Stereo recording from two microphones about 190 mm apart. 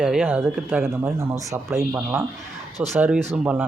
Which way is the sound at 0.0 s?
5° right (ahead or behind).